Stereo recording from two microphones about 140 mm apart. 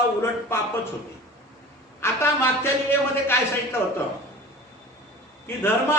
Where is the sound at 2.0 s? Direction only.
20° left (ahead or behind).